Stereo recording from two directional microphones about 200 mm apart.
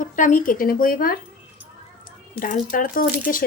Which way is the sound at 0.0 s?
40° left (ahead or behind).